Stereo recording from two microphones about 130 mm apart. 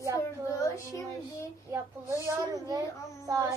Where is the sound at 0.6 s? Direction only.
25° left (ahead or behind).